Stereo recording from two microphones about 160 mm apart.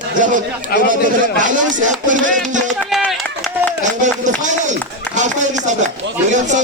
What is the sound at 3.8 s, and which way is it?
A man's voice, 50° right (ahead or behind).